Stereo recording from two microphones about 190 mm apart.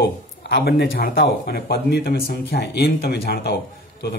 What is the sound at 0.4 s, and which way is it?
Speech, 65° left (ahead or behind).